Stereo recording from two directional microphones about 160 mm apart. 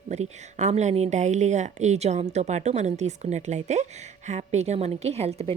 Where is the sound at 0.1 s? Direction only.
45° right (ahead or behind).